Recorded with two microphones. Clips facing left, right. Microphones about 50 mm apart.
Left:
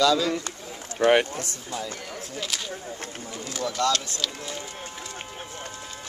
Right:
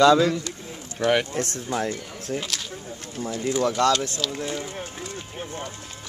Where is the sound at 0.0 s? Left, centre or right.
Right.